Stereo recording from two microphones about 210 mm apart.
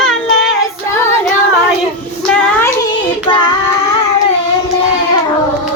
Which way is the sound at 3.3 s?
20° left (ahead or behind).